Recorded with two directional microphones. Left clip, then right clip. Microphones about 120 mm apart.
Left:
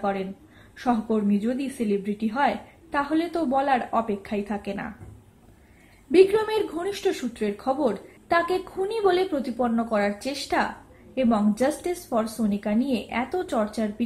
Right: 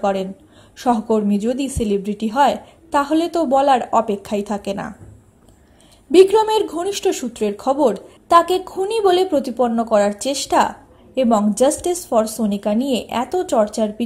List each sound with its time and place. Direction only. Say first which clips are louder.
1.0 s a woman's voice: right 7 dB; 30° right (ahead or behind)
6.1 s a woman's voice: right 7 dB; 30° right (ahead or behind)
13.4 s speech: right 13 dB; 20° right (ahead or behind)